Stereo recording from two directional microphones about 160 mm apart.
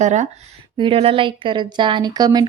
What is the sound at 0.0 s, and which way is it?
Speech, 45° right (ahead or behind).